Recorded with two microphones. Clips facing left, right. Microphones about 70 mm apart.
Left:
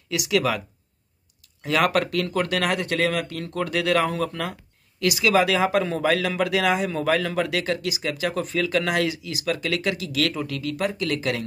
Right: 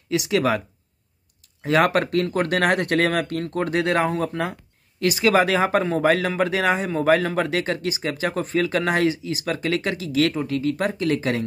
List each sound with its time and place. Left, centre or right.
0.1 s speech: right
1.6 s speech: right